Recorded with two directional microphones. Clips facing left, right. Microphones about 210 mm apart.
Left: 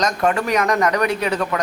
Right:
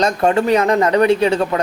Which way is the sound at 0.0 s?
30° right (ahead or behind).